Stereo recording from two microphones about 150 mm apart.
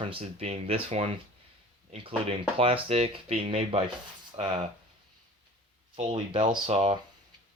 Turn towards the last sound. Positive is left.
turn(degrees=-40)  # may be behind; listen again after turning